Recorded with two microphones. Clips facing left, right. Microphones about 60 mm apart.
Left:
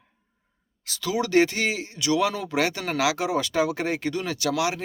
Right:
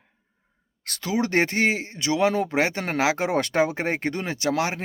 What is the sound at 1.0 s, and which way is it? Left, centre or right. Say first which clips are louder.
Speech: left 2 dB; right.